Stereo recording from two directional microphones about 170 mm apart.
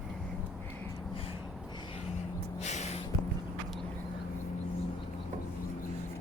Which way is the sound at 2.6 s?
40° left (ahead or behind).